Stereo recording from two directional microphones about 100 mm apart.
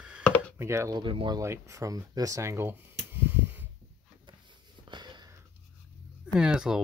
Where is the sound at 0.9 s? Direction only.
55° right (ahead or behind).